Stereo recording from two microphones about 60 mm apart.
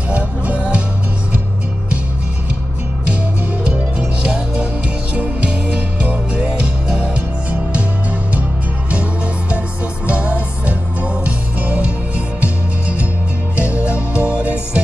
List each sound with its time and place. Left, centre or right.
0.1 s music: right
3.6 s music: right
10.0 s music: right